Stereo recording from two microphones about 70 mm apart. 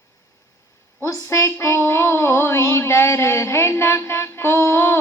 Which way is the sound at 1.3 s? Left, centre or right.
Left.